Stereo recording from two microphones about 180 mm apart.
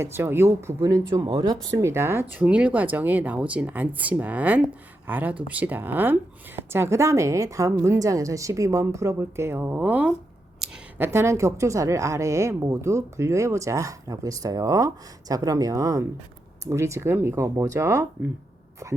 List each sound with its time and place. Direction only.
0.0 s a woman's voice: 15° right (ahead or behind)